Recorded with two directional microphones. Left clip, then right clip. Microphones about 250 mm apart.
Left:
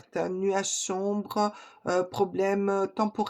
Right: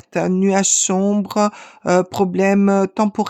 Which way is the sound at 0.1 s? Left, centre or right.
Right.